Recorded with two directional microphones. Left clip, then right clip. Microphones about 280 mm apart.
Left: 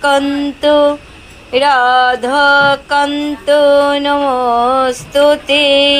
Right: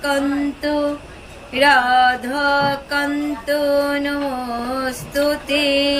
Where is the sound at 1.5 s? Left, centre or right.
Centre.